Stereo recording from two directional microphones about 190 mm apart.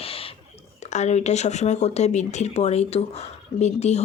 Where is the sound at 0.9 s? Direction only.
35° left (ahead or behind).